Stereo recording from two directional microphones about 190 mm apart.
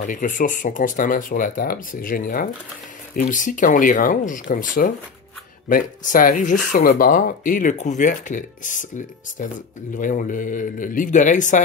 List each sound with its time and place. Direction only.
0.0 s speech: 40° left (ahead or behind)